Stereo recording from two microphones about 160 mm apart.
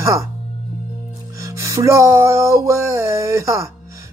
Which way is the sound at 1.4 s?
20° right (ahead or behind).